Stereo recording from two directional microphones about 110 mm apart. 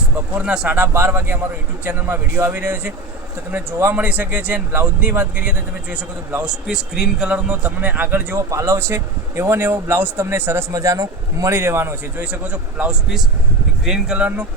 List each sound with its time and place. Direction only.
0.3 s a man's voice: 10° right (ahead or behind)
10.7 s a man's voice: 30° right (ahead or behind); by 14.4 s 15° right (ahead or behind)